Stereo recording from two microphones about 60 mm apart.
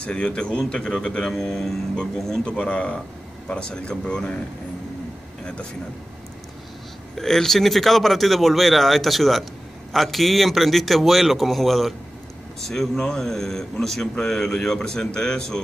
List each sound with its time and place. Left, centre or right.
0.0 s speech: centre
2.4 s speech: centre
7.2 s speech: centre